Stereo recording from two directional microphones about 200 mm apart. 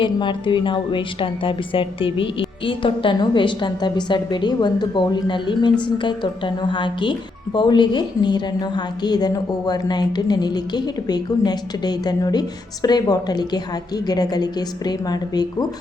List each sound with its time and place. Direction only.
0.0 s speech: 25° left (ahead or behind)